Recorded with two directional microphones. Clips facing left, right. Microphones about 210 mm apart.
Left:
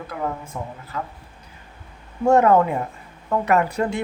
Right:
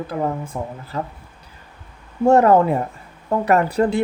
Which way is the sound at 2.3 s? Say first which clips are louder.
Right 2 dB; 35° right (ahead or behind).